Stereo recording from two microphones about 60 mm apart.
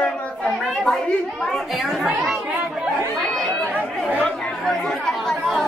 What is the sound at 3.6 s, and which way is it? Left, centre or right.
Chatter, left.